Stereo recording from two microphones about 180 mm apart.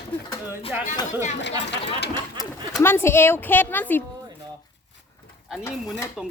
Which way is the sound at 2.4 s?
20° left (ahead or behind).